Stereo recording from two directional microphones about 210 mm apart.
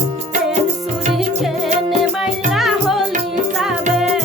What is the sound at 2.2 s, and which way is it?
Music, centre (ahead or behind).